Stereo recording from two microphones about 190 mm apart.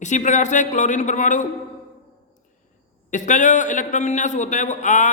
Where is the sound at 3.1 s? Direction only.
40° left (ahead or behind).